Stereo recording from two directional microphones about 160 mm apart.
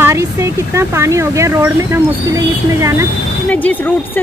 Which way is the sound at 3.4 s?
10° left (ahead or behind).